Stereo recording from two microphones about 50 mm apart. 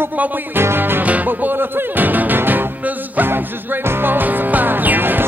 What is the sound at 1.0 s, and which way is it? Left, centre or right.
Music, right.